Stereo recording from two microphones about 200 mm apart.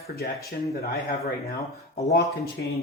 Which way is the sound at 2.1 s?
55° left (ahead or behind).